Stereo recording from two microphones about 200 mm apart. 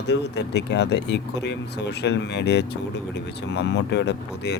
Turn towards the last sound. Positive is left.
turn(degrees=60)  # may be behind; listen again after turning